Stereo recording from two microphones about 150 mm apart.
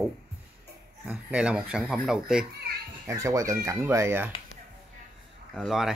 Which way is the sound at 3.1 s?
20° right (ahead or behind).